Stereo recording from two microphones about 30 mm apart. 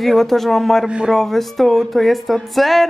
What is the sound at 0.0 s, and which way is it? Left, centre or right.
A woman's voice, centre.